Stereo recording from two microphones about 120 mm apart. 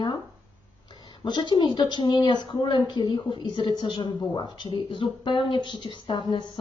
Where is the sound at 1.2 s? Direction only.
40° left (ahead or behind).